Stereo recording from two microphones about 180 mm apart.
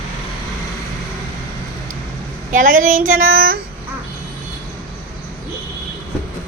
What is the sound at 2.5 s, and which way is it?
Child singing, 50° right (ahead or behind).